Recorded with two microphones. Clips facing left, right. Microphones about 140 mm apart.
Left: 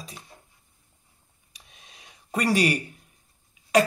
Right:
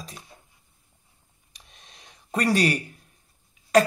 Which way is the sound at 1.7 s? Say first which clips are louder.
Even; 5° left (ahead or behind).